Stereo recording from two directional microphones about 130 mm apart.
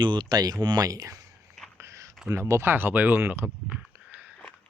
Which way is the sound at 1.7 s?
20° right (ahead or behind).